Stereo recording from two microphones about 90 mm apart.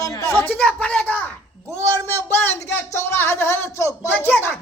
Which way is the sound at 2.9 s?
25° left (ahead or behind).